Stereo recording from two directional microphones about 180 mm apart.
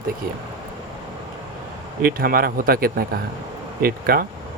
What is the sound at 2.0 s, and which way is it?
A man's voice, 55° right (ahead or behind).